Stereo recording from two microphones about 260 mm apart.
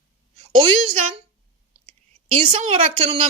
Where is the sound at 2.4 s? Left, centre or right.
Right.